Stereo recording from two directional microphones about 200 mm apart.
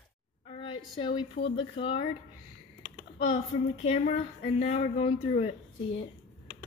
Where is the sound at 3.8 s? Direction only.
35° left (ahead or behind).